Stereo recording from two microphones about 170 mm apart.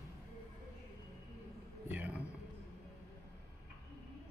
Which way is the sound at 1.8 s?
10° right (ahead or behind).